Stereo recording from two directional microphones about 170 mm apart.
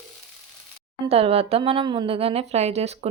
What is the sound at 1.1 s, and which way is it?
A woman's voice, 35° right (ahead or behind).